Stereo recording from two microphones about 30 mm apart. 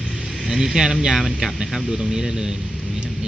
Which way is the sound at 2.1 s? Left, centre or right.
Centre.